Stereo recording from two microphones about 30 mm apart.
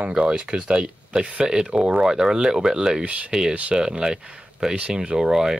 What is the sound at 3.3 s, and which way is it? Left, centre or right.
Speech, right.